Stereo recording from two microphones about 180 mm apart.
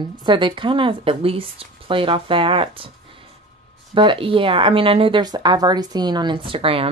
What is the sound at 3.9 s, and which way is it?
Speech, 30° right (ahead or behind).